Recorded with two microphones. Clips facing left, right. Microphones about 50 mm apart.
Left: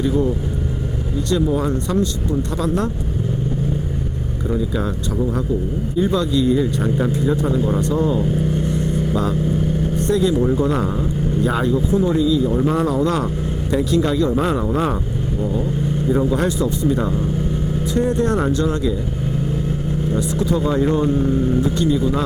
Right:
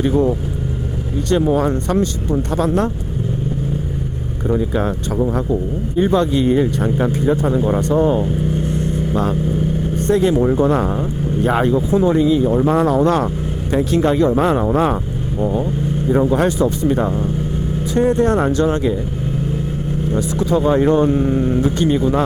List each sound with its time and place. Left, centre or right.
0.0 s speech: right
2.6 s speech: right
4.5 s speech: right
7.4 s speech: right
8.2 s vehicle: centre
9.1 s speech: right
12.6 s speech: right
14.0 s speech: right
16.0 s speech: right
18.3 s speech: right
18.5 s speech: right
20.1 s speech: right
21.1 s speech: right
21.6 s speech: right